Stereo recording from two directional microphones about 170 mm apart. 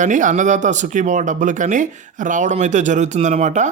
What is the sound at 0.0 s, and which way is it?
Speech, 50° right (ahead or behind).